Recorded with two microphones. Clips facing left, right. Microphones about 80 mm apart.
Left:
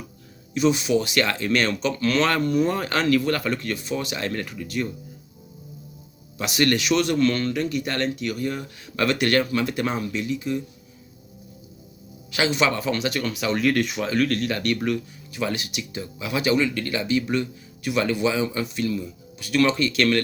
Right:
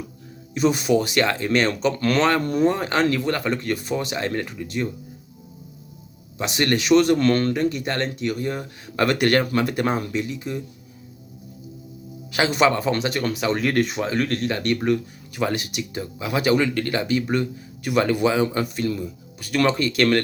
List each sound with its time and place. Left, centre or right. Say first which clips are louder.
0.5 s speech: right 1 dB; right
6.4 s speech: even; right
9.0 s speech: right 2 dB; right
12.3 s speech: right 3 dB; right
15.4 s speech: right 3 dB; right